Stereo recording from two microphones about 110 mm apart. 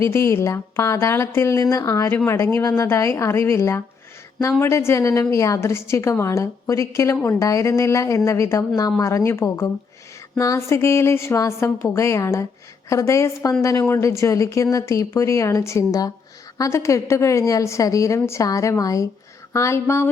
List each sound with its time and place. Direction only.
0.1 s a woman's voice: 25° left (ahead or behind)